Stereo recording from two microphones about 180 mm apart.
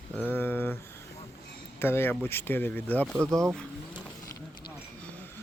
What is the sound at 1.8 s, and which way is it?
Speech, 15° left (ahead or behind).